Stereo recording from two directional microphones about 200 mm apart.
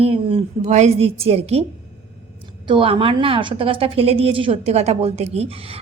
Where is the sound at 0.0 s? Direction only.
30° right (ahead or behind).